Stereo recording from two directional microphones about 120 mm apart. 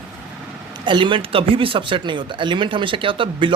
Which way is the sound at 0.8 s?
45° right (ahead or behind).